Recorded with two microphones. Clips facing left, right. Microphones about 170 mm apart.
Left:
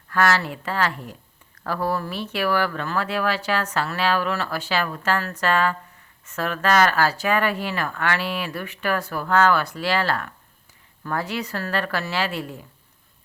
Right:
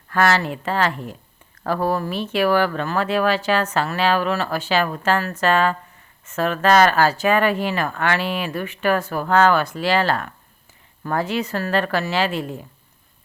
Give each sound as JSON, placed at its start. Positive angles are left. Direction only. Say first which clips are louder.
{"t": 0.1, "sound": "speech", "louder": "right 2 dB", "side_deg": -25}